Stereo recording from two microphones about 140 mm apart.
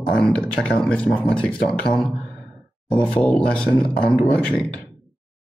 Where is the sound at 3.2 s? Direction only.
10° left (ahead or behind).